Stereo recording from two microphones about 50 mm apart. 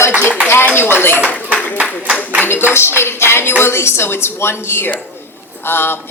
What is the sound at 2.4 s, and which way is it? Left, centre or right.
A woman's voice, left.